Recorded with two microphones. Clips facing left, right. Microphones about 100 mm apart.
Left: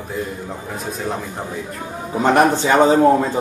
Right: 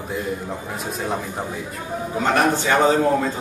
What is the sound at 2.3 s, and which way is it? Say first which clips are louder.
Speech: left 4 dB; 20° left (ahead or behind).